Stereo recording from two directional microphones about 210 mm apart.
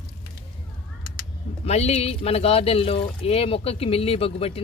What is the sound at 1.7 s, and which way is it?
A woman's voice, 30° left (ahead or behind).